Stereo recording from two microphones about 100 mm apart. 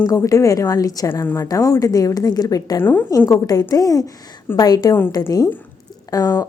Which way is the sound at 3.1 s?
35° left (ahead or behind).